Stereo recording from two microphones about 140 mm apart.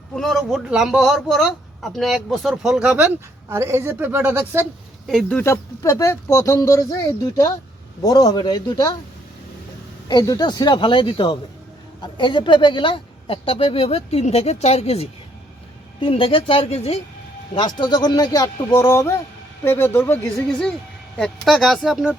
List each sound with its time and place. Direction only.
0.2 s speech: centre (ahead or behind)
3.5 s a woman's voice: 20° right (ahead or behind)
5.0 s speech: centre (ahead or behind)
5.4 s a man's voice: 20° left (ahead or behind)
10.1 s speech: 30° left (ahead or behind); by 17.0 s 45° left (ahead or behind)
17.5 s a man's voice: 30° left (ahead or behind); by 20.1 s 15° left (ahead or behind)
20.3 s speech: 5° left (ahead or behind)